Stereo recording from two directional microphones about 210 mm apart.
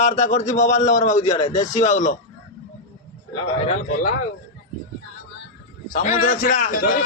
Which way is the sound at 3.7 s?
35° left (ahead or behind).